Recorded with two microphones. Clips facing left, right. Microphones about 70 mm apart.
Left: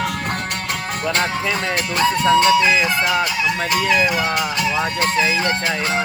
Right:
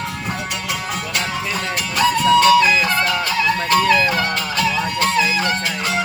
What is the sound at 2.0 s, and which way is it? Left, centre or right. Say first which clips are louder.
Music: right 1 dB; left.